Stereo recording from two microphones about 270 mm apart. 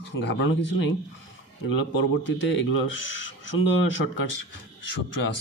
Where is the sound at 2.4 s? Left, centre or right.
Left.